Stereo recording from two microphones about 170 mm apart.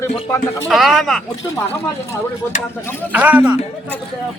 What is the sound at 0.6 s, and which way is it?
Speech, centre (ahead or behind).